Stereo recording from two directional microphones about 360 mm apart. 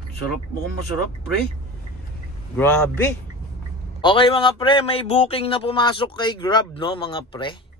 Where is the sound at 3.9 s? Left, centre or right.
Centre.